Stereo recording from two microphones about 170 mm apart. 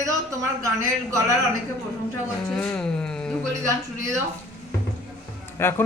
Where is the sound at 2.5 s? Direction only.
5° left (ahead or behind).